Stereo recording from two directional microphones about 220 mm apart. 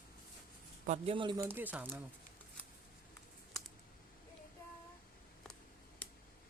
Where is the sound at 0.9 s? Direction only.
25° right (ahead or behind).